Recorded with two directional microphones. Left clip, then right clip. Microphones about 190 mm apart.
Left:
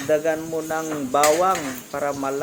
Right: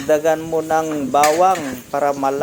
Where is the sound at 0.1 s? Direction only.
20° right (ahead or behind).